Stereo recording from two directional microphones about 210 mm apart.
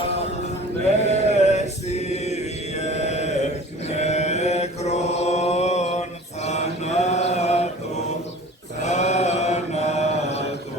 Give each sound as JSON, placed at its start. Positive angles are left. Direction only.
{"t": 1.0, "sound": "chant", "side_deg": 30}
{"t": 8.8, "sound": "mantra", "side_deg": 35}